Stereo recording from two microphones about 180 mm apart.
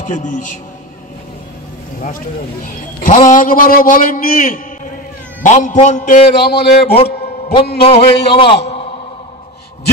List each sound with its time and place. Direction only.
0.0 s a man's voice: 45° left (ahead or behind)
2.0 s a man's voice: 50° left (ahead or behind)
6.3 s speech: 65° left (ahead or behind)
7.8 s speech: 35° left (ahead or behind)